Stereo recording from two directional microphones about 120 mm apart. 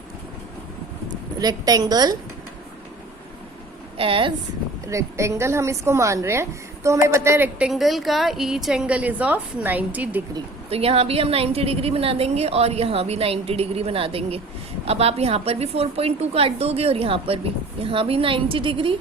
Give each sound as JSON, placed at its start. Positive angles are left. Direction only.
{"t": 1.4, "sound": "a woman's voice", "side_deg": -35}
{"t": 3.9, "sound": "a woman's voice", "side_deg": -50}
{"t": 4.9, "sound": "a woman's voice", "side_deg": -25}
{"t": 7.7, "sound": "a woman's voice", "side_deg": 0}
{"t": 10.7, "sound": "a woman's voice", "side_deg": -55}